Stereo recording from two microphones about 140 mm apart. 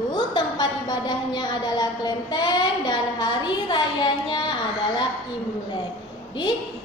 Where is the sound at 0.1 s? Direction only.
30° left (ahead or behind).